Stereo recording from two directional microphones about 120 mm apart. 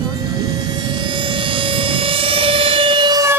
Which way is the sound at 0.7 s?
40° right (ahead or behind).